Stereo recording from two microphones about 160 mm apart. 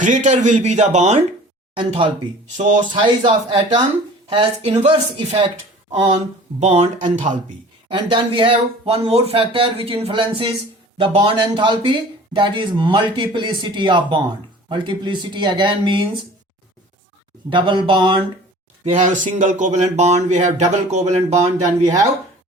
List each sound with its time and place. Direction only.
0.0 s speech: 50° right (ahead or behind)
1.8 s speech: 35° right (ahead or behind)
2.6 s speech: 50° right (ahead or behind)
2.9 s speech: 30° right (ahead or behind)
6.6 s speech: 40° right (ahead or behind)
7.9 s speech: 30° right (ahead or behind)
17.5 s speech: 30° right (ahead or behind)
18.9 s speech: 50° right (ahead or behind)